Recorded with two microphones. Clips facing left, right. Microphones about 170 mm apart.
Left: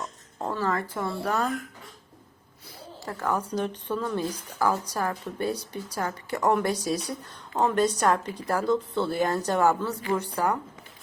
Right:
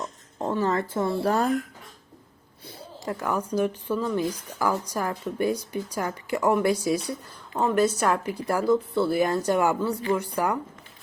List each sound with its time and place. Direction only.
0.4 s speech: 20° right (ahead or behind)
2.6 s a sound: 15° right (ahead or behind)
3.5 s speech: 10° right (ahead or behind)